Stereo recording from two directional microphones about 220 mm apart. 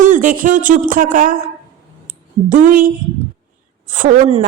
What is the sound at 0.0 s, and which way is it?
Speech, 35° right (ahead or behind).